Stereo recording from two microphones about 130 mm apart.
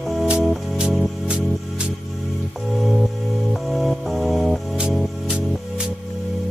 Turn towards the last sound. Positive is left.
turn(degrees=-5)  # may be behind; listen again after turning